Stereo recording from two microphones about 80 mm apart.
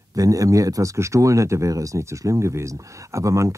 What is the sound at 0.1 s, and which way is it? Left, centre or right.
Speech, right.